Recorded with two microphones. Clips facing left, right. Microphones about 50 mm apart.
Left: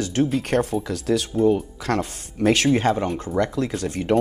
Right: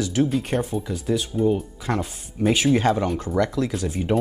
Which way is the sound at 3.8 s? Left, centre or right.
Left.